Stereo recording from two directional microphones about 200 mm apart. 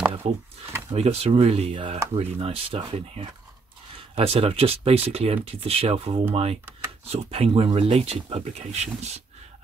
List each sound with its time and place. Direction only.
0.2 s speech: 30° right (ahead or behind)